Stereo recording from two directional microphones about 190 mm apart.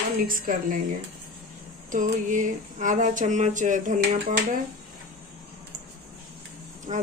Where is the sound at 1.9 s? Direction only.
40° right (ahead or behind).